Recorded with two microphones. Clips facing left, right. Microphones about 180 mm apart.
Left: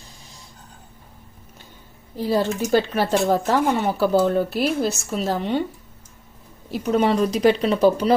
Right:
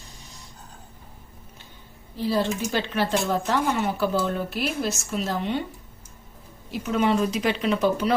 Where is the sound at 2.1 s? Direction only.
40° left (ahead or behind).